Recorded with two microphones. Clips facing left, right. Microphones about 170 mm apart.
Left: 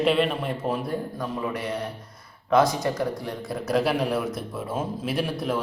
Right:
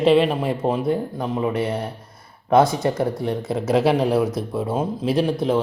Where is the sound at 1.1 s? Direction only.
25° right (ahead or behind).